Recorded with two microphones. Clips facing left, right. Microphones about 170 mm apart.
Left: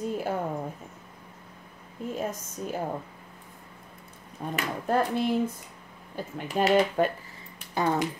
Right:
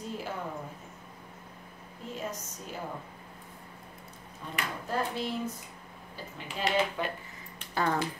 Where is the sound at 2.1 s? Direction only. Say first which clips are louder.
Left 5 dB; 50° left (ahead or behind).